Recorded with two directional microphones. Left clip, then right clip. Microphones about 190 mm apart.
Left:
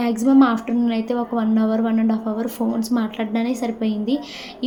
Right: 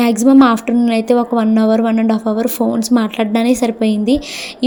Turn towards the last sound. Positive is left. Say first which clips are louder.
# right 8 dB
turn(degrees=-45)  # may be behind; listen again after turning